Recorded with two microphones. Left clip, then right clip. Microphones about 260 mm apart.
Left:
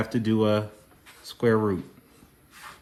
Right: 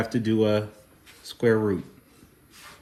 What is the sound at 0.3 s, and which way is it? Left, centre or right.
Speech, left.